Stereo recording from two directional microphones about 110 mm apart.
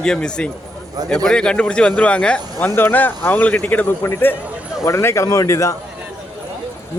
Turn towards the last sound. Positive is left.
turn(degrees=30)  # may be behind; listen again after turning